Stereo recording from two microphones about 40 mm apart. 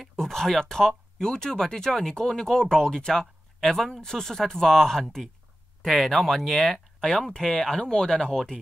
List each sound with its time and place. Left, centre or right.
0.0 s speech: centre
5.9 s speech: centre
7.0 s speech: centre
7.8 s speech: left